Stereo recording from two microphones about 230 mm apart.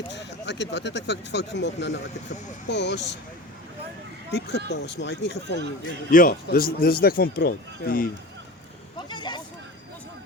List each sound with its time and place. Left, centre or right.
0.1 s speech: left
4.3 s speech: left
9.0 s a sound: centre